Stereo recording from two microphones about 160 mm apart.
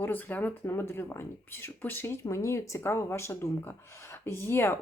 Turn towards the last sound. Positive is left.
turn(degrees=15)  # may be behind; listen again after turning